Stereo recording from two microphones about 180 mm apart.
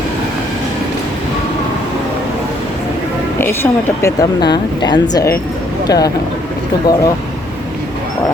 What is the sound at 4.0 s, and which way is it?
Speech, 20° left (ahead or behind).